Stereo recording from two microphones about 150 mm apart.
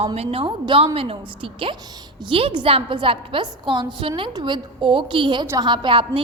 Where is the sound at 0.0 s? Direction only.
40° right (ahead or behind).